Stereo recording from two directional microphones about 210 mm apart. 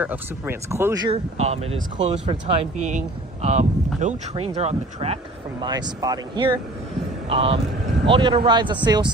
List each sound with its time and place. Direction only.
0.0 s speech: 10° right (ahead or behind)